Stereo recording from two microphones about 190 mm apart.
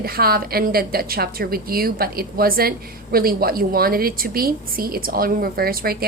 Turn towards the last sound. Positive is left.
turn(degrees=-50)  # may be behind; listen again after turning